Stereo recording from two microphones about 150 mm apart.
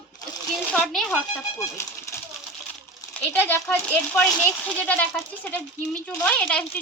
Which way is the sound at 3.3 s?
15° left (ahead or behind).